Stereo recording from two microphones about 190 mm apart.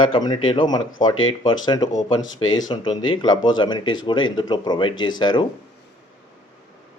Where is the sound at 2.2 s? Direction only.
90° left.